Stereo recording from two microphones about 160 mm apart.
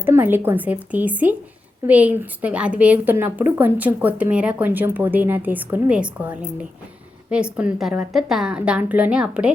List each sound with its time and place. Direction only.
0.0 s a woman's voice: 15° right (ahead or behind)